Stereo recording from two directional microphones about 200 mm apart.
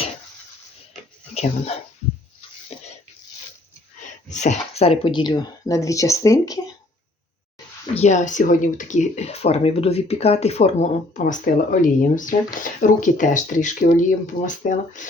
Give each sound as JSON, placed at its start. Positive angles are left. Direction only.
{"t": 1.3, "sound": "speech", "side_deg": 30}
{"t": 4.3, "sound": "speech", "side_deg": 35}
{"t": 7.9, "sound": "speech", "side_deg": 35}